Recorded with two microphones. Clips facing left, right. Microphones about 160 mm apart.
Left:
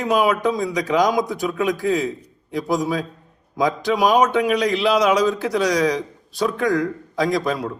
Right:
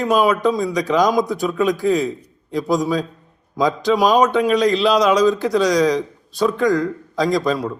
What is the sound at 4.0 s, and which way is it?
A man's voice, 20° left (ahead or behind).